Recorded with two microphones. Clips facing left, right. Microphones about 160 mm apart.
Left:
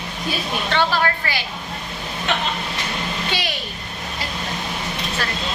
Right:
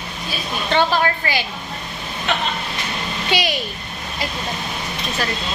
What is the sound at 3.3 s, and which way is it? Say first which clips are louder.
Speech: right 9 dB; 15° right (ahead or behind).